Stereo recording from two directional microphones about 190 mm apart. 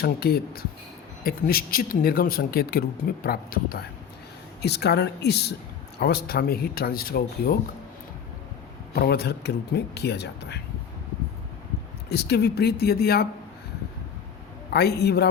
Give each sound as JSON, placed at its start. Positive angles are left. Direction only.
{"t": 0.0, "sound": "a man's voice", "side_deg": 55}
{"t": 9.0, "sound": "a man's voice", "side_deg": 55}
{"t": 12.0, "sound": "a man's voice", "side_deg": 60}
{"t": 14.7, "sound": "a man's voice", "side_deg": 60}